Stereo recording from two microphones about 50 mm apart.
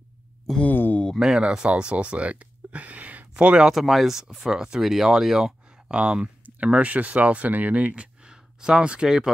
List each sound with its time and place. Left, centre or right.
0.7 s a sound: left
1.1 s speech: centre
1.7 s speech: right
3.6 s speech: centre